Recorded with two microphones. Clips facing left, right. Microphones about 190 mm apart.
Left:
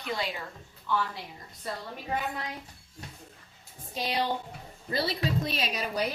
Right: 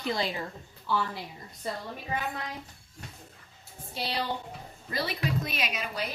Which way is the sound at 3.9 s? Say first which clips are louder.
Left 2 dB; 15° left (ahead or behind).